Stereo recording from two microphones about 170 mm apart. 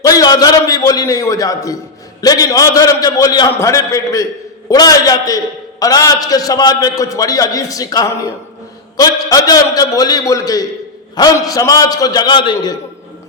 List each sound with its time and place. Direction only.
0.0 s a man's voice: 20° left (ahead or behind)